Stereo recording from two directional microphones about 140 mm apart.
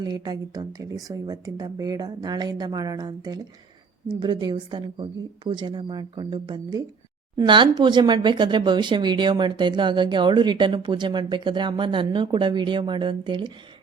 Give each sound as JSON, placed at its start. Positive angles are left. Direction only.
{"t": 0.0, "sound": "speech", "side_deg": -30}